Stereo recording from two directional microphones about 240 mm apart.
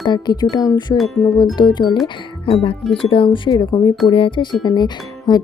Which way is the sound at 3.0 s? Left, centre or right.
Left.